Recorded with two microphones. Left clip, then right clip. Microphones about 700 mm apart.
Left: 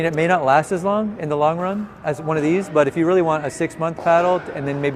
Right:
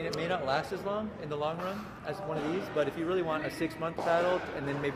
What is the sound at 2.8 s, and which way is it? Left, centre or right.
A man's voice, left.